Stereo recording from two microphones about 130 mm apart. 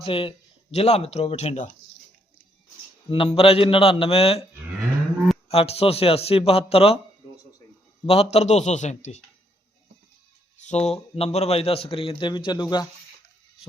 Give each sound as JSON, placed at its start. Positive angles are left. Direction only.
{"t": 0.0, "sound": "speech", "side_deg": 45}
{"t": 3.1, "sound": "a man's voice", "side_deg": 45}
{"t": 5.5, "sound": "a man's voice", "side_deg": 50}
{"t": 8.0, "sound": "a man's voice", "side_deg": 50}
{"t": 10.6, "sound": "a man's voice", "side_deg": 60}